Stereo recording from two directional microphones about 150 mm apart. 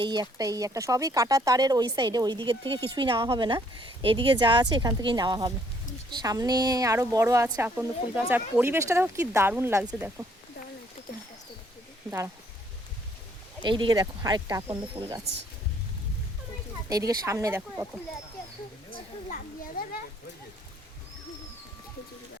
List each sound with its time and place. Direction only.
0.0 s speech: 25° right (ahead or behind)
13.6 s speech: 30° right (ahead or behind)
15.0 s speech: 40° right (ahead or behind)
16.9 s speech: 25° right (ahead or behind)
19.3 s children playing: 70° left (ahead or behind)